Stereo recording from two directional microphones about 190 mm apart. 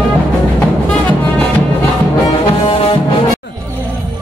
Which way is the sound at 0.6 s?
10° left (ahead or behind).